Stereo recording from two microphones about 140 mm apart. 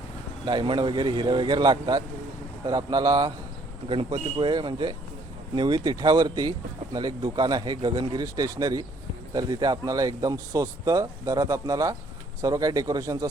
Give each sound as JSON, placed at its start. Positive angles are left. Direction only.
{"t": 0.4, "sound": "speech", "side_deg": -35}
{"t": 3.8, "sound": "speech", "side_deg": -40}